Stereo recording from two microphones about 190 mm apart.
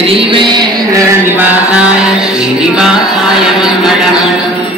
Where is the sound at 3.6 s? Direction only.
5° right (ahead or behind).